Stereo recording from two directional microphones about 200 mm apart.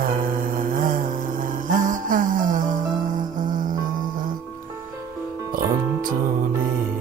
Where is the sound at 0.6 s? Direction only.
40° right (ahead or behind).